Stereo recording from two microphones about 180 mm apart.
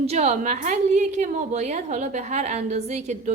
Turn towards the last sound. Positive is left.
turn(degrees=-40)  # may be behind; listen again after turning